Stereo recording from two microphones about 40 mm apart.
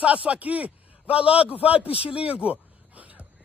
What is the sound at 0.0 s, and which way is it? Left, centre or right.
A man's voice, right.